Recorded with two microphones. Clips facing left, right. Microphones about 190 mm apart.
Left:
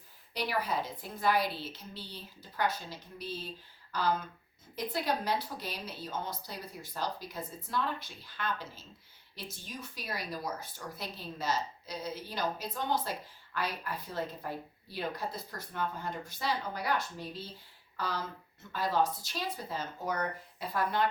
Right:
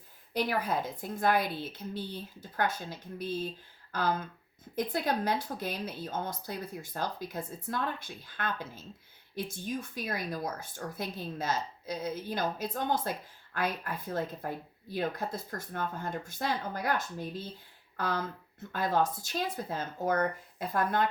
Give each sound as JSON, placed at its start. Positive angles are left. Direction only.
{"t": 0.3, "sound": "speech", "side_deg": -50}